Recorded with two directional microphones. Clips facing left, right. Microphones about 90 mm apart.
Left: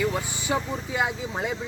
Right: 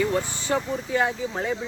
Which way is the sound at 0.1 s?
15° left (ahead or behind).